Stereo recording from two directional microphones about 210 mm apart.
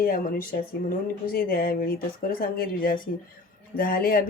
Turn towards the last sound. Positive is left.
turn(degrees=45)  # may be behind; listen again after turning